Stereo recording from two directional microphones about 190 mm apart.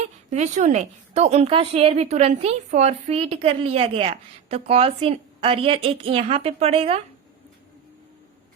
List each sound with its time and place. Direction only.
0.3 s a woman's voice: 40° right (ahead or behind)